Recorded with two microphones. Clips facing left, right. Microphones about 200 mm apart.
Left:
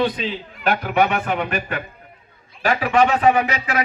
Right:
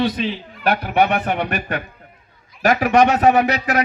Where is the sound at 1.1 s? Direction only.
40° right (ahead or behind).